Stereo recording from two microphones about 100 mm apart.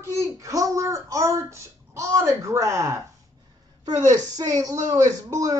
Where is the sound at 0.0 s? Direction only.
30° right (ahead or behind).